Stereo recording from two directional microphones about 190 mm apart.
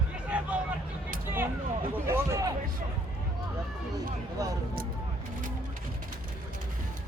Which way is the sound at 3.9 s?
20° right (ahead or behind).